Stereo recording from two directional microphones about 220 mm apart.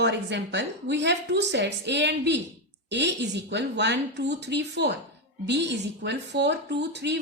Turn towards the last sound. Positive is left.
turn(degrees=-50)  # may be behind; listen again after turning